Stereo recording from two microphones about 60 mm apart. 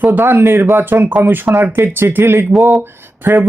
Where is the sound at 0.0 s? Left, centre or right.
Right.